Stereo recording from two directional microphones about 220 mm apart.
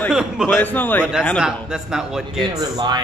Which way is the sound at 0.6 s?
10° left (ahead or behind).